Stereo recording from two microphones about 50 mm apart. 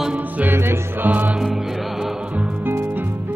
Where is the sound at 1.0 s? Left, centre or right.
Right.